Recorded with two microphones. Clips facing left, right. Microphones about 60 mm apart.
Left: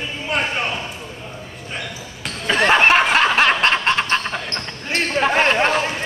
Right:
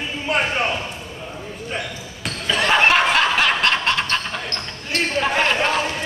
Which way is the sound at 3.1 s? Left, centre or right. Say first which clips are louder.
Left 2 dB; left.